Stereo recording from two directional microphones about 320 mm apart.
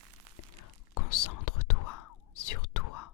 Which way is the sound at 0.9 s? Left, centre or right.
Left.